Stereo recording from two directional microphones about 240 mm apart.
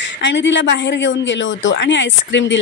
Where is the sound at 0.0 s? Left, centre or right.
Left.